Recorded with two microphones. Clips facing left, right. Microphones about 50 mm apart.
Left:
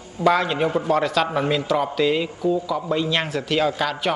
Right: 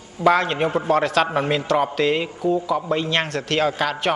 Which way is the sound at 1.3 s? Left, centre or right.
Centre.